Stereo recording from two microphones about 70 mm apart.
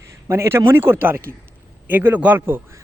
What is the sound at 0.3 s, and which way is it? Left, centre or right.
A man's voice, right.